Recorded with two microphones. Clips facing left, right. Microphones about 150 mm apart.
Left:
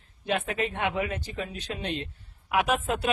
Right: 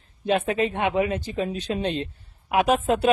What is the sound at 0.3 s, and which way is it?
Speech, 25° right (ahead or behind).